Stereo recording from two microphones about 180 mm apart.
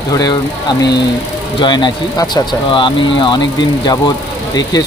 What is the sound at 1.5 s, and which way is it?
Speech, 25° left (ahead or behind).